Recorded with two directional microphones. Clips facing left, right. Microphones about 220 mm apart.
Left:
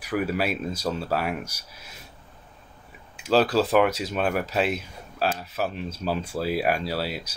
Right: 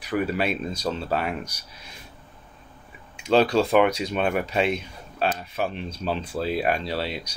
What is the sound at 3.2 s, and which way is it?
Speech, 5° left (ahead or behind).